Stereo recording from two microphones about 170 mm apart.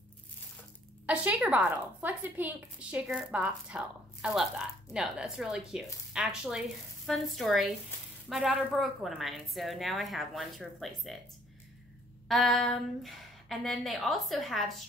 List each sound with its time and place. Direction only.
1.0 s a woman's voice: 10° right (ahead or behind)
12.3 s a woman's voice: centre (ahead or behind)